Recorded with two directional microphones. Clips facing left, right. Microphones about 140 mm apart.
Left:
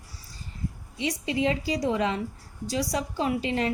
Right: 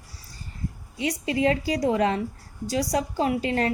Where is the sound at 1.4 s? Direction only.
45° right (ahead or behind).